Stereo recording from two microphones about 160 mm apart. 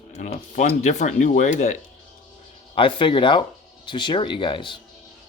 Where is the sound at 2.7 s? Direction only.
30° left (ahead or behind).